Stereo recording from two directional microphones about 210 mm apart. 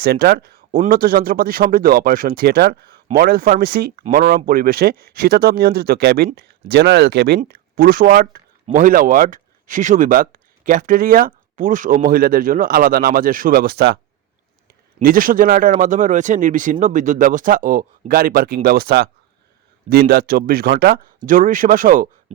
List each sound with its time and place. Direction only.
0.0 s speech: 45° right (ahead or behind)